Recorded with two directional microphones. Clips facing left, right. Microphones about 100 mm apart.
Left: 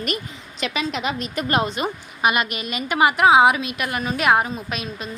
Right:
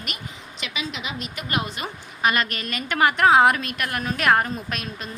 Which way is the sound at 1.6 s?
20° left (ahead or behind).